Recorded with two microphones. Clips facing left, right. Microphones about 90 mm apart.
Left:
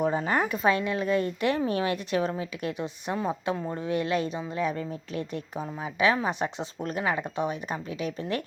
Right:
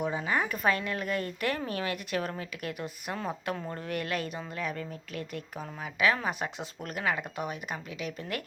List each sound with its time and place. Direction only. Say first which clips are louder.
0.0 s a sound: left 4 dB; 40° left (ahead or behind)
0.4 s speech: left 4 dB; 25° left (ahead or behind)
3.2 s speech: left 5 dB; 15° left (ahead or behind); by 8.4 s 30° left (ahead or behind)